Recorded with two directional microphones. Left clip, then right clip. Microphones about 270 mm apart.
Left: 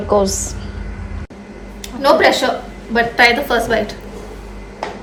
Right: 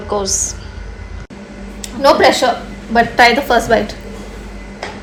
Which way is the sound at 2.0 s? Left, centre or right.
Centre.